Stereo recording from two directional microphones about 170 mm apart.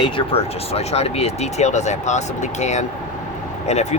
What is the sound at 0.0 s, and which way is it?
Speech, 35° left (ahead or behind).